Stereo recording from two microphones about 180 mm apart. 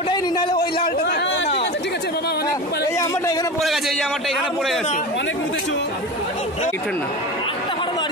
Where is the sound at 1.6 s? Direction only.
75° left (ahead or behind).